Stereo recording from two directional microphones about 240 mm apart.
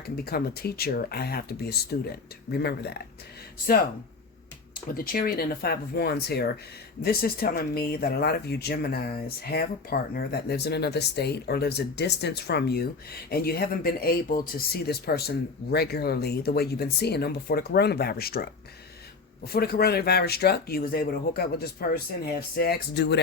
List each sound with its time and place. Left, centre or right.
0.3 s speech: left
4.9 s speech: left